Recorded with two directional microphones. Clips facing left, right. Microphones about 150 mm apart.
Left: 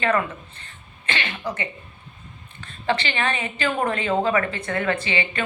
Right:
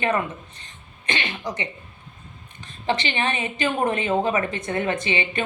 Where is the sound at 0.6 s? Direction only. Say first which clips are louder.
Left 1 dB; 15° right (ahead or behind).